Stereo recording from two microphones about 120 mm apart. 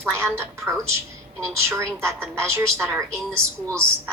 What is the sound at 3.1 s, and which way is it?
Speech, 10° left (ahead or behind).